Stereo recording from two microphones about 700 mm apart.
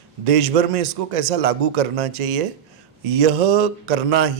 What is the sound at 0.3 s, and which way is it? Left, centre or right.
A man's voice, right.